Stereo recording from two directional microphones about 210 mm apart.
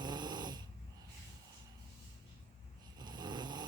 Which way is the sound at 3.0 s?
20° right (ahead or behind).